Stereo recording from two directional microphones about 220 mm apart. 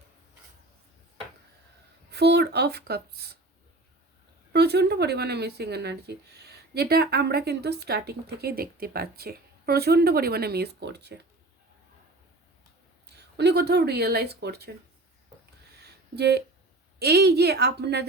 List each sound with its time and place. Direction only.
2.0 s speech: 50° right (ahead or behind)
4.5 s speech: 50° right (ahead or behind)
13.1 s speech: 50° right (ahead or behind)
15.7 s a sound: 45° right (ahead or behind)
17.0 s speech: 45° right (ahead or behind)